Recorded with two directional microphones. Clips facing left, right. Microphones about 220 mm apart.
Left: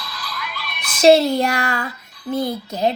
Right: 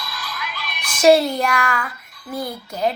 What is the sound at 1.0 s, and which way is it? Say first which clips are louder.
Child singing: left 2 dB; 25° left (ahead or behind).